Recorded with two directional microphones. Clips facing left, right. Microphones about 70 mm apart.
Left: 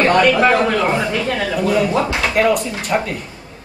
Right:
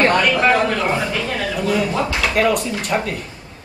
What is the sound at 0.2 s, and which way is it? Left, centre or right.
Speech, centre.